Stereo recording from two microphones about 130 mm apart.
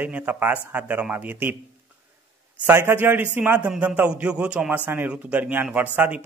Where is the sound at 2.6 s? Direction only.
15° right (ahead or behind).